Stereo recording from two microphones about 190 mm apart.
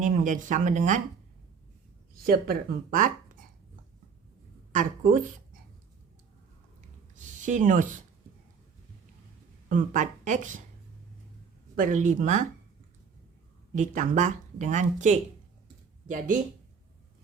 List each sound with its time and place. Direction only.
0.0 s speech: 45° right (ahead or behind)
2.1 s speech: 50° right (ahead or behind)
4.7 s speech: 40° right (ahead or behind)
7.4 s speech: 40° right (ahead or behind)
9.6 s speech: 40° right (ahead or behind)
11.8 s speech: 40° right (ahead or behind)
13.7 s speech: 40° right (ahead or behind)